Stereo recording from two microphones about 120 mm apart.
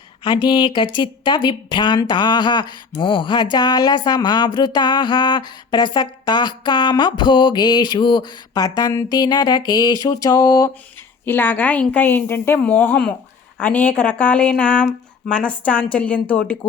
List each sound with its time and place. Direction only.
0.3 s speech: 40° left (ahead or behind)
11.3 s a woman's voice: 15° left (ahead or behind)